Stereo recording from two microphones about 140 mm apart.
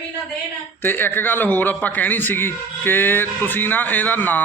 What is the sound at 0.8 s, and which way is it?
A man's voice, 15° left (ahead or behind).